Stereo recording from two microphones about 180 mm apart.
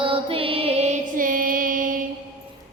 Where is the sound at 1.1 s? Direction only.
50° right (ahead or behind).